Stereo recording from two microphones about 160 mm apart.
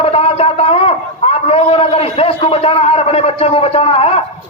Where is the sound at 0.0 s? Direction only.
40° left (ahead or behind).